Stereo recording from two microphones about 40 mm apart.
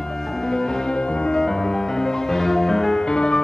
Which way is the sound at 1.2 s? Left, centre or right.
Centre.